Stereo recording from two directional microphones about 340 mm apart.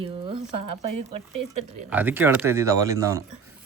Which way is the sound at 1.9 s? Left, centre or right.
Centre.